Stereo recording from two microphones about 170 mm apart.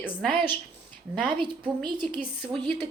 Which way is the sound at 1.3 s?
30° right (ahead or behind).